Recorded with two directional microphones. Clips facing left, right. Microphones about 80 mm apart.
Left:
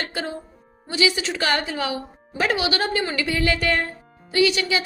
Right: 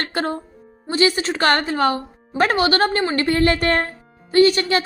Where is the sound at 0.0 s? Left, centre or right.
Right.